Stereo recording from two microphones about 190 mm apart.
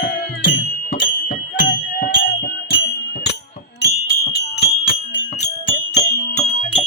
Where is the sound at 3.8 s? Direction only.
55° left (ahead or behind).